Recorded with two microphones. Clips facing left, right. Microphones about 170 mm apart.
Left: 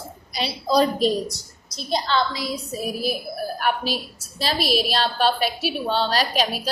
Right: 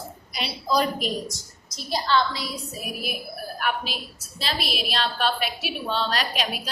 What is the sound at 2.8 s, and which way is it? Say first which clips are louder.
A woman's voice: left 8 dB; 35° left (ahead or behind).